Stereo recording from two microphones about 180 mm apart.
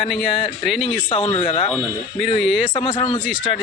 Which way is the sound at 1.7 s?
Centre (ahead or behind).